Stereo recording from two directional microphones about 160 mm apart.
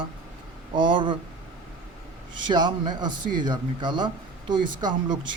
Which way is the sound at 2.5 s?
25° right (ahead or behind).